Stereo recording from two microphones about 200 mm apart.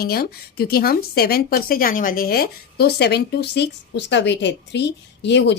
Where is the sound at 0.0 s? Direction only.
50° left (ahead or behind).